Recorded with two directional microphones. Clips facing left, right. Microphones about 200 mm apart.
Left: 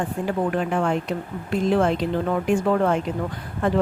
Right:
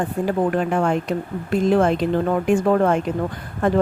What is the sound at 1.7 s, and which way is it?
A woman's voice, 45° right (ahead or behind).